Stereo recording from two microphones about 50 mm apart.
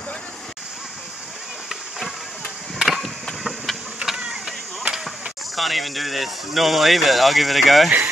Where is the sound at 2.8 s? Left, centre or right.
Centre.